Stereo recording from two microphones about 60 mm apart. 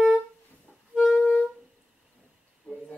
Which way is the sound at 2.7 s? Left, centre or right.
Centre.